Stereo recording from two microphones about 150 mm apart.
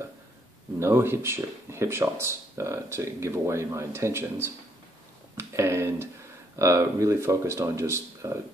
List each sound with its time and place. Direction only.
0.7 s speech: 15° right (ahead or behind)